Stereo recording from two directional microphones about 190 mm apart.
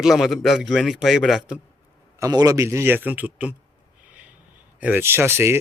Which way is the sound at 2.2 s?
20° right (ahead or behind).